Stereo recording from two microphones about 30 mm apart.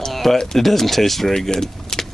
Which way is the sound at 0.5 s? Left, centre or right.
Centre.